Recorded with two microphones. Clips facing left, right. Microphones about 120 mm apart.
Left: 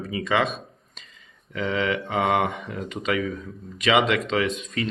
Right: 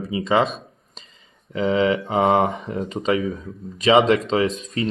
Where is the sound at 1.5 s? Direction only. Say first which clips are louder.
Right 6 dB; 30° right (ahead or behind).